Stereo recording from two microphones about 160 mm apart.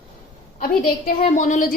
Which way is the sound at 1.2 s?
45° left (ahead or behind).